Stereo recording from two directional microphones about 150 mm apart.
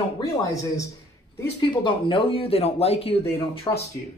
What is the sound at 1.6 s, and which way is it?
Speech, 35° left (ahead or behind).